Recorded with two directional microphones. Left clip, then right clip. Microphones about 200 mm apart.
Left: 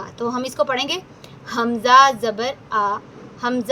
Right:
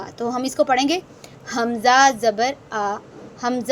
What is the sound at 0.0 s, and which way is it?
A woman's voice, 15° right (ahead or behind).